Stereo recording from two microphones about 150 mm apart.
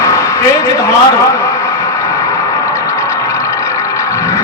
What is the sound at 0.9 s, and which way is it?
Speech, 20° left (ahead or behind).